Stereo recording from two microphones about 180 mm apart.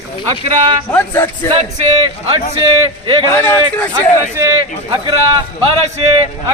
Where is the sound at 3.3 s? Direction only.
15° left (ahead or behind).